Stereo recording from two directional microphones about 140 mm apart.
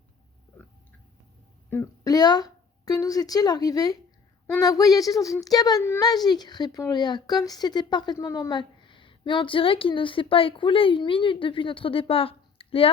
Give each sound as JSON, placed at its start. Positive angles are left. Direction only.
{"t": 1.7, "sound": "speech", "side_deg": 25}